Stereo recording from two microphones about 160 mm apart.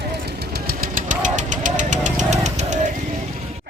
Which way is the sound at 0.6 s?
60° right (ahead or behind).